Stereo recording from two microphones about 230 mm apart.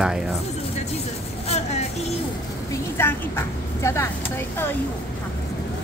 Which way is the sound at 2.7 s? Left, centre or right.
Centre.